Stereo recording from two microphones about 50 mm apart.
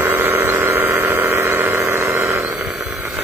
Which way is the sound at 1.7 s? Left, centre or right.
Right.